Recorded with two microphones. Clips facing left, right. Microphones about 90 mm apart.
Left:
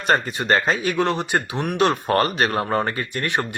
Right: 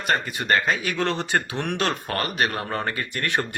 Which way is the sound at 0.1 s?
30° left (ahead or behind).